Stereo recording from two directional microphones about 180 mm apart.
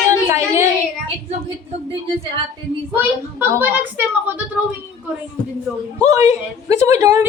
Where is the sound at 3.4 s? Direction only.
10° right (ahead or behind).